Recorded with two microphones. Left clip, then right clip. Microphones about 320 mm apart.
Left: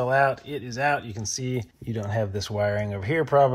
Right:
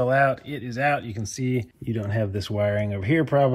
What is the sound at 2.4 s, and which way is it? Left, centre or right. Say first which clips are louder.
Speech: right 3 dB; left.